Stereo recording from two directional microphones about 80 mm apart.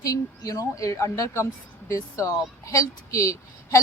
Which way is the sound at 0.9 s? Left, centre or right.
Left.